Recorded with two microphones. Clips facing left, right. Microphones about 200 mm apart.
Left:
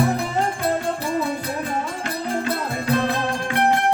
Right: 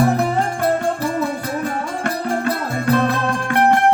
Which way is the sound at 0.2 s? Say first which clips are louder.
Right 4 dB; 55° right (ahead or behind).